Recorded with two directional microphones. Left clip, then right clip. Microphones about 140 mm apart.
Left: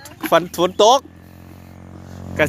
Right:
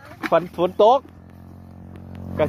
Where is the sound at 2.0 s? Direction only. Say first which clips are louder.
Left 3 dB; 10° left (ahead or behind).